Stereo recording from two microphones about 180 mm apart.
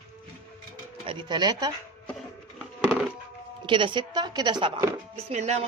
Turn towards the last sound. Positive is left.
turn(degrees=-40)  # may be behind; listen again after turning